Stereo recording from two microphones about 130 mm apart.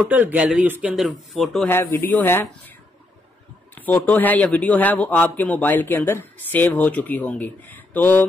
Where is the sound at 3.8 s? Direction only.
15° left (ahead or behind).